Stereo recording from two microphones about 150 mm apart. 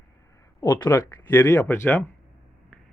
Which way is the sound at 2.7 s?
10° left (ahead or behind).